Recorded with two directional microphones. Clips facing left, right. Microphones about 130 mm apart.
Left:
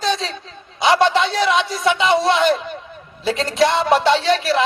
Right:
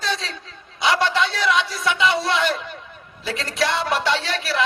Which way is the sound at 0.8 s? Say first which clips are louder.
Left 5 dB; 25° left (ahead or behind).